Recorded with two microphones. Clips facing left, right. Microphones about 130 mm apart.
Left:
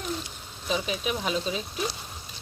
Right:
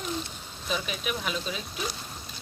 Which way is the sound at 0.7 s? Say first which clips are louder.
Left 3 dB; 30° left (ahead or behind).